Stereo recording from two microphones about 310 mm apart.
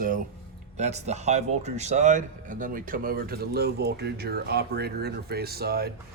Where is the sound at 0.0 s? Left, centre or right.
Right.